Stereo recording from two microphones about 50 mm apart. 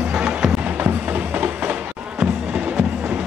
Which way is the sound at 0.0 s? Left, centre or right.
Centre.